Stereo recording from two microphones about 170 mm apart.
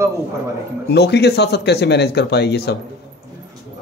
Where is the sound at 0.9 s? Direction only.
75° left (ahead or behind).